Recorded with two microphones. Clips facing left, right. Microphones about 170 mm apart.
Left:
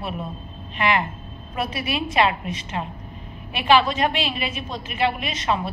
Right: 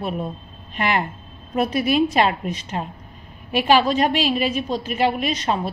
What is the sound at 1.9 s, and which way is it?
A woman's voice, 45° right (ahead or behind).